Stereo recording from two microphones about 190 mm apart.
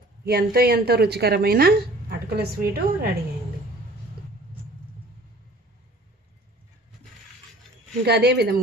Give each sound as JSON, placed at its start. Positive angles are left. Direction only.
{"t": 0.3, "sound": "speech", "side_deg": -55}
{"t": 8.0, "sound": "speech", "side_deg": -60}